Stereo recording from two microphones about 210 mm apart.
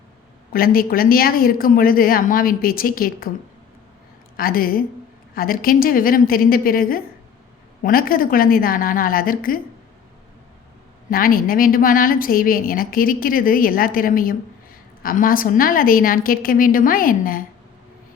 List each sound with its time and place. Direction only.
0.5 s a woman's voice: 45° left (ahead or behind)
4.4 s a woman's voice: 45° left (ahead or behind)
11.1 s a woman's voice: 45° left (ahead or behind)